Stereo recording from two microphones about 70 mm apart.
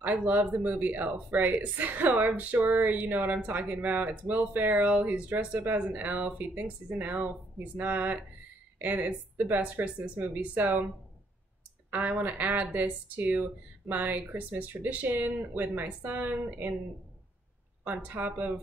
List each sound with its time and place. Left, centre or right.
0.0 s speech: right
11.9 s speech: right
17.8 s speech: right